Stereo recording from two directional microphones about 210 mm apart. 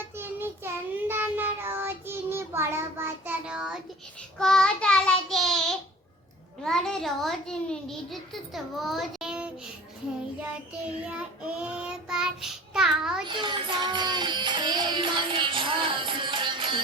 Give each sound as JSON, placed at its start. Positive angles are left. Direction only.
{"t": 0.2, "sound": "child singing", "side_deg": -10}
{"t": 6.6, "sound": "a child's voice", "side_deg": 0}
{"t": 10.8, "sound": "a child's voice", "side_deg": -5}
{"t": 13.2, "sound": "music", "side_deg": -20}